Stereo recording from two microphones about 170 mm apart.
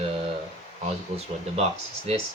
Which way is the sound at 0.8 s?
35° right (ahead or behind).